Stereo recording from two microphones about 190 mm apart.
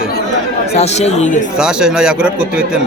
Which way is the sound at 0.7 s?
35° left (ahead or behind).